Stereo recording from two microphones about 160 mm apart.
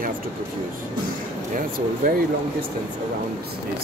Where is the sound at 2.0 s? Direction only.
65° right (ahead or behind).